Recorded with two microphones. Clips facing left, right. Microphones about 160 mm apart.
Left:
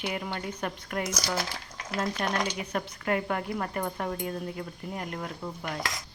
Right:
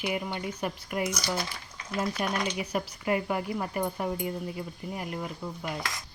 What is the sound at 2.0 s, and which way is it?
Speech, 10° right (ahead or behind).